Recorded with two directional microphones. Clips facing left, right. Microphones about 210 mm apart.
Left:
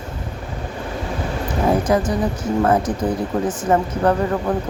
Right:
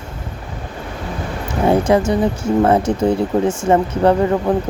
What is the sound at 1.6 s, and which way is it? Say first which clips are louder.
Speech: right 4 dB; 25° right (ahead or behind).